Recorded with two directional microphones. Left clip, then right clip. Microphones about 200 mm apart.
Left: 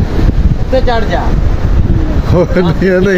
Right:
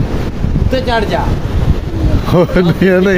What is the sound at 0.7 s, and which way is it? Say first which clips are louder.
Speech: left 2 dB; 60° right (ahead or behind).